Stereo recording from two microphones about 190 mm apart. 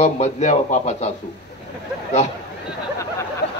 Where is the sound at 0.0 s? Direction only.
35° left (ahead or behind).